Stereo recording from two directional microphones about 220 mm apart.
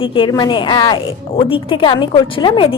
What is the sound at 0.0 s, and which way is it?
A woman's voice, 25° left (ahead or behind).